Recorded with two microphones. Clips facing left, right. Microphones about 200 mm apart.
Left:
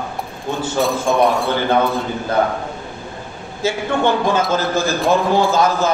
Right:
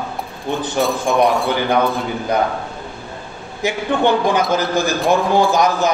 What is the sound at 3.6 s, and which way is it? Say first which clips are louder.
A man's voice: right 1 dB; 15° right (ahead or behind).